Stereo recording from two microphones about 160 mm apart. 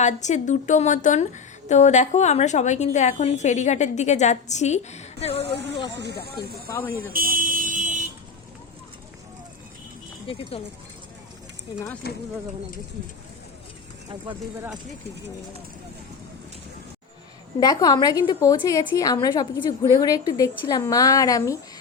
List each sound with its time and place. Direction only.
0.0 s a woman's voice: 50° left (ahead or behind)
6.7 s speech: 15° left (ahead or behind)
7.1 s buzzer: 65° right (ahead or behind)
10.2 s speech: 35° left (ahead or behind)
12.0 s speech: 75° left (ahead or behind)
17.6 s a woman's voice: 25° left (ahead or behind)